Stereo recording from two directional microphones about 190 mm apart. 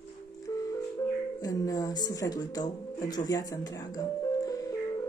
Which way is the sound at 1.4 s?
20° left (ahead or behind).